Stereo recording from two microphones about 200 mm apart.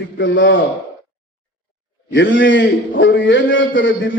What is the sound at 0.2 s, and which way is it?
Speech, 65° left (ahead or behind).